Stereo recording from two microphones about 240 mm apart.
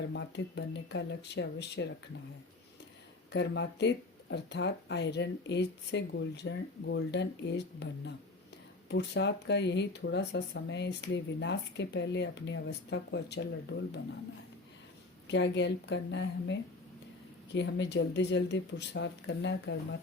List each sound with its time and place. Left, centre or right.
0.1 s speech: left
3.3 s speech: left
15.3 s speech: left